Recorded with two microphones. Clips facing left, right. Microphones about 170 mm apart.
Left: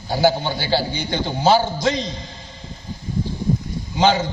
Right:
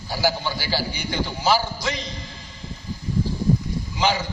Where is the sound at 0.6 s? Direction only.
25° left (ahead or behind).